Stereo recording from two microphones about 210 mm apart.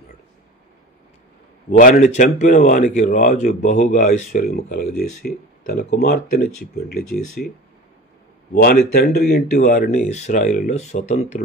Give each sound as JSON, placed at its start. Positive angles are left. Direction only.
{"t": 1.7, "sound": "speech", "side_deg": 40}
{"t": 8.5, "sound": "speech", "side_deg": 45}